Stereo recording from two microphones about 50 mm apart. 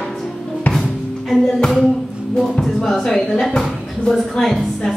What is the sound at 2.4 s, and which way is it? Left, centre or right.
A woman's voice, centre.